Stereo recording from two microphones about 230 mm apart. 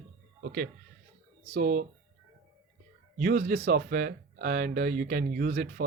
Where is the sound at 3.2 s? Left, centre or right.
Right.